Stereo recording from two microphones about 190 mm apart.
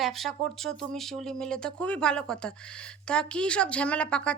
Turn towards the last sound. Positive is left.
turn(degrees=5)  # may be behind; listen again after turning